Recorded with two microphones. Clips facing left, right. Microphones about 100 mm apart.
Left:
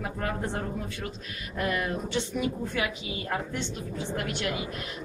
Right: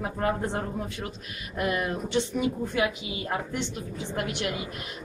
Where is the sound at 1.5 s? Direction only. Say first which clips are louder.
Right 1 dB; 20° right (ahead or behind).